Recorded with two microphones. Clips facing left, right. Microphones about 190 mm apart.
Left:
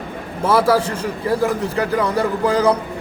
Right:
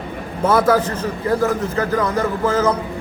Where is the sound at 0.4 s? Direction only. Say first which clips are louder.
Even; 10° left (ahead or behind).